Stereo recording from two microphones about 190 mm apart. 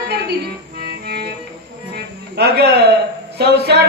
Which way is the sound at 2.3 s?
60° right (ahead or behind).